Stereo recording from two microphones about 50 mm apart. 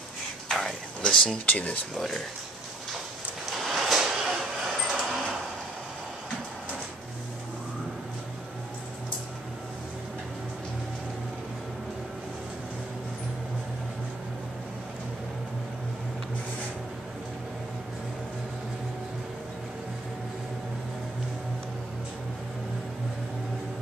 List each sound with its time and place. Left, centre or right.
0.5 s a sound: centre
1.4 s speech: left
2.0 s speech: centre
3.4 s vehicle: centre